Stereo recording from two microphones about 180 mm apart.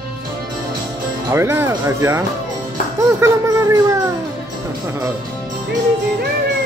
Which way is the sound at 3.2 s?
15° right (ahead or behind).